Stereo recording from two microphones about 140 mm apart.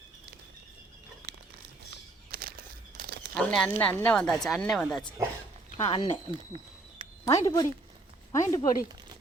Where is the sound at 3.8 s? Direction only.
10° left (ahead or behind).